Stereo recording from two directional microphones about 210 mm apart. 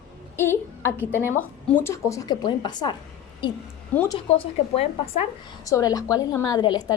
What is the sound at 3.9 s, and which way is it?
Speech, 10° left (ahead or behind).